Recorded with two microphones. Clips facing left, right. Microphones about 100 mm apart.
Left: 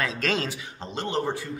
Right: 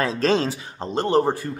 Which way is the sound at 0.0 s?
35° right (ahead or behind).